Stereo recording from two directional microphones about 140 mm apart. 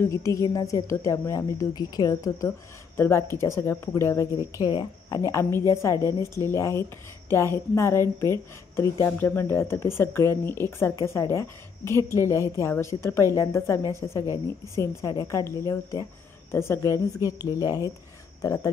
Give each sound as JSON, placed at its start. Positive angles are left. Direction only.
{"t": 0.0, "sound": "a woman's voice", "side_deg": 20}